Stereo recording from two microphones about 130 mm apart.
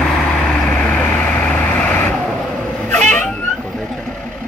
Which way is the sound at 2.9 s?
10° left (ahead or behind).